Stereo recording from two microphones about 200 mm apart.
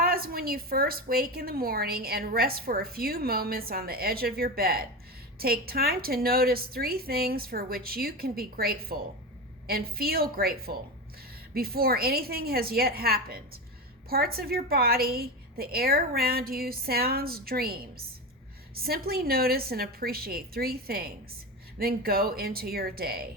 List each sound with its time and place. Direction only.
0.0 s a woman's voice: 50° right (ahead or behind)